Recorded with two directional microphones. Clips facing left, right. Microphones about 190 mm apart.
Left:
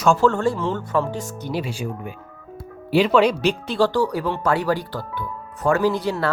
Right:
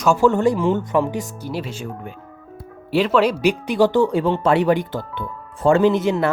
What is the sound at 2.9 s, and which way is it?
Speech, centre (ahead or behind).